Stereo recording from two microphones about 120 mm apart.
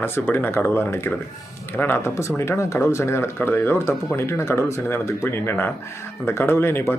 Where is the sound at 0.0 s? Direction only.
20° left (ahead or behind).